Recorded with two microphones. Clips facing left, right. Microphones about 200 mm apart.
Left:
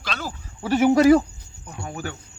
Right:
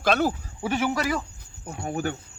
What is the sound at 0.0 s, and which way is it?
Speech, 60° right (ahead or behind).